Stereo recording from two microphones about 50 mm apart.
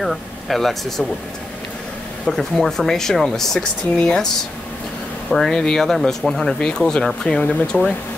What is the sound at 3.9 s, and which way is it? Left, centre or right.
Speech, centre.